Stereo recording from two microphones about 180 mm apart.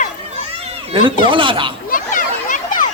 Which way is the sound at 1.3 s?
30° right (ahead or behind).